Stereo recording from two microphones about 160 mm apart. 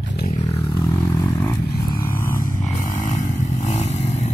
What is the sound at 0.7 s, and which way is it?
Vehicle, 20° left (ahead or behind).